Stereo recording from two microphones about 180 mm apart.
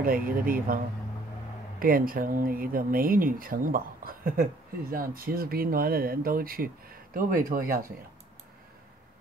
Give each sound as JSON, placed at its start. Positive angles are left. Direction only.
{"t": 0.0, "sound": "speech", "side_deg": -55}
{"t": 1.8, "sound": "speech", "side_deg": -50}